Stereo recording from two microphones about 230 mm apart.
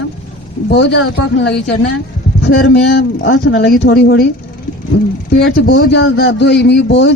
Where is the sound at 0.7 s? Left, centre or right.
Left.